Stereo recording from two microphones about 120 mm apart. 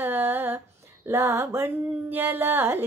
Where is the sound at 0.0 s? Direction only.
20° right (ahead or behind).